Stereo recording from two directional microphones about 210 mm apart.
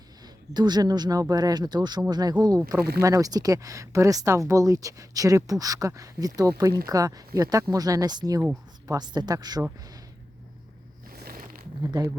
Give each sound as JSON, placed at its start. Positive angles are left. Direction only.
{"t": 0.5, "sound": "speech", "side_deg": -20}
{"t": 11.1, "sound": "a sound", "side_deg": -45}
{"t": 11.8, "sound": "speech", "side_deg": -20}